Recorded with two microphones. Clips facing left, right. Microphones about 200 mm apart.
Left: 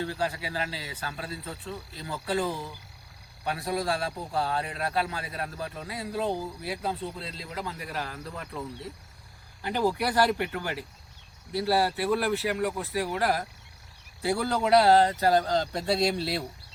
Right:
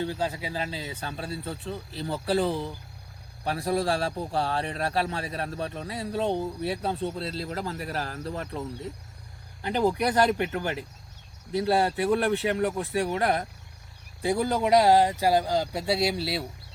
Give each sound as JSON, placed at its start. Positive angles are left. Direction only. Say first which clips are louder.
{"t": 0.0, "sound": "a man's voice", "louder": "right 1 dB", "side_deg": -20}
{"t": 7.4, "sound": "speech", "louder": "right 4 dB", "side_deg": -45}
{"t": 9.6, "sound": "a man's voice", "louder": "right 2 dB", "side_deg": -20}